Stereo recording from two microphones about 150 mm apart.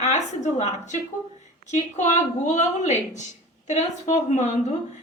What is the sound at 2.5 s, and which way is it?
A woman's voice, 50° left (ahead or behind).